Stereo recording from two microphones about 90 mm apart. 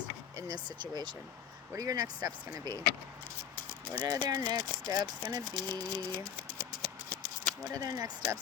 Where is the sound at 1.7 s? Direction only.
40° right (ahead or behind).